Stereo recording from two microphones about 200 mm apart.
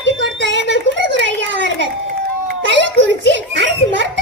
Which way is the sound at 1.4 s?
65° right (ahead or behind).